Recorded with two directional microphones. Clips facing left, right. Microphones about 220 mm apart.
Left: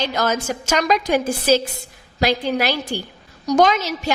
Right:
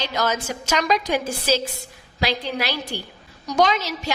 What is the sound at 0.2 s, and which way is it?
A woman's voice, 45° left (ahead or behind).